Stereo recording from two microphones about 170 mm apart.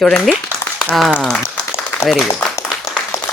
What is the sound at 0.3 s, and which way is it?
Speech, centre (ahead or behind).